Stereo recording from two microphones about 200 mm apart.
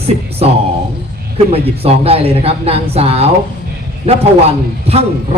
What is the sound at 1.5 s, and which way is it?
A man's voice, 30° right (ahead or behind).